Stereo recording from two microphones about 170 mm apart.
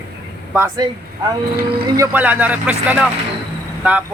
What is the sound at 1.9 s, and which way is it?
Speech, 15° right (ahead or behind).